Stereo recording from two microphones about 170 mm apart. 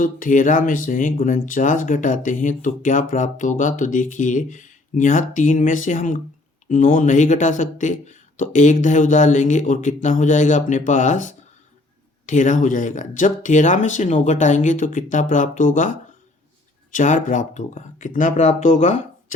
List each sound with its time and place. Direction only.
0.0 s speech: 50° left (ahead or behind)